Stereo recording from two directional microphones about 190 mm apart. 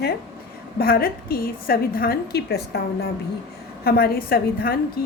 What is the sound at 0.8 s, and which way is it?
A woman's voice, 50° left (ahead or behind).